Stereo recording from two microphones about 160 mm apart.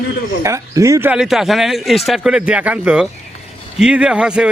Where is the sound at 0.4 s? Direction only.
20° right (ahead or behind).